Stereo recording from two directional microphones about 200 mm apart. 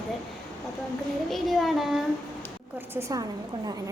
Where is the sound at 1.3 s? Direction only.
Centre (ahead or behind).